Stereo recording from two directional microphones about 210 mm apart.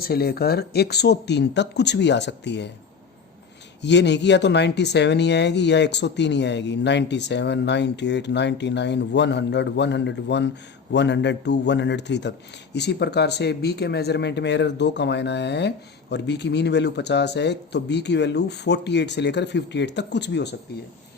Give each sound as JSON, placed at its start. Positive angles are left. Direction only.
{"t": 0.0, "sound": "speech", "side_deg": 45}
{"t": 3.8, "sound": "speech", "side_deg": 55}